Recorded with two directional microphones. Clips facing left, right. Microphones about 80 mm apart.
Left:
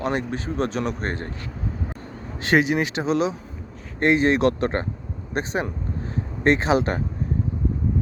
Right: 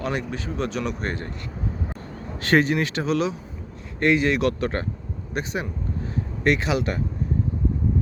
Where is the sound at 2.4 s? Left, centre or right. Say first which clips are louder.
Even; centre; by 7.0 s left.